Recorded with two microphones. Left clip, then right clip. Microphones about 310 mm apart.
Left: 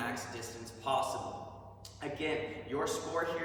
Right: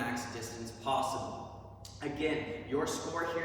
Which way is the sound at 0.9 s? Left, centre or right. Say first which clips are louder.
Even; centre.